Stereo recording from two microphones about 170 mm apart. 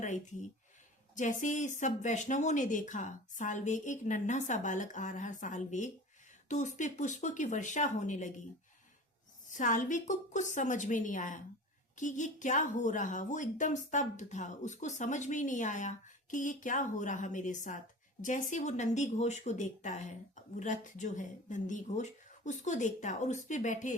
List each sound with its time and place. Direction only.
0.0 s a woman's voice: 45° left (ahead or behind)
9.5 s a woman's voice: 45° left (ahead or behind)